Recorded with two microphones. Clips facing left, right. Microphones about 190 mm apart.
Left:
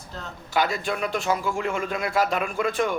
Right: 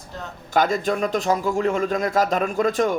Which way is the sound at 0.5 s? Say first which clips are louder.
Right 5 dB; 45° right (ahead or behind).